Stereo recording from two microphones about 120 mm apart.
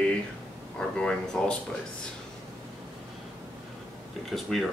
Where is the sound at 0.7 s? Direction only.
5° left (ahead or behind).